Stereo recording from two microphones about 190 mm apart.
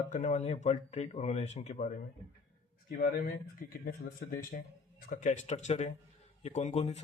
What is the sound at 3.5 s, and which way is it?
Speech, 50° left (ahead or behind).